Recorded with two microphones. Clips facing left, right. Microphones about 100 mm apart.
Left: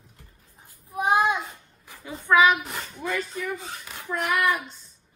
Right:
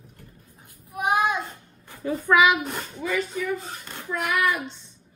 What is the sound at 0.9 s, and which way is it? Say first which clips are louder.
Child singing: left 1 dB; 30° left (ahead or behind).